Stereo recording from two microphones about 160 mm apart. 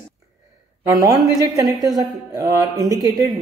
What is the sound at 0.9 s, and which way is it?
Speech, 25° right (ahead or behind).